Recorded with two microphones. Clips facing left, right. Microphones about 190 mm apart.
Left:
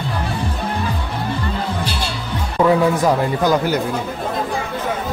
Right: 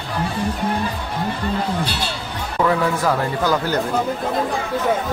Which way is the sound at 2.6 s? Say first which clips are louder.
Left 4 dB; 20° left (ahead or behind).